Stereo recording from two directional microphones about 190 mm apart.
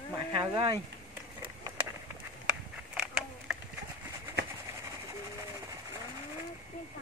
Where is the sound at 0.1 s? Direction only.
25° right (ahead or behind).